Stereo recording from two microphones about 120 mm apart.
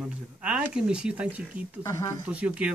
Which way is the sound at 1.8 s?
30° left (ahead or behind).